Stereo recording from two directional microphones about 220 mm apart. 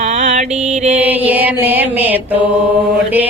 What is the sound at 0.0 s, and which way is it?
Mantra, 30° right (ahead or behind).